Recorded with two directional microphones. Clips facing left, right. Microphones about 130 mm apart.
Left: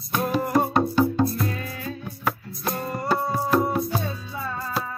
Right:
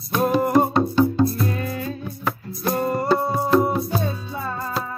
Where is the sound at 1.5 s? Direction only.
40° right (ahead or behind).